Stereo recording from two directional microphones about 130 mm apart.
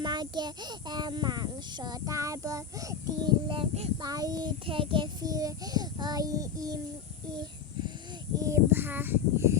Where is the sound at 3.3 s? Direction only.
40° right (ahead or behind).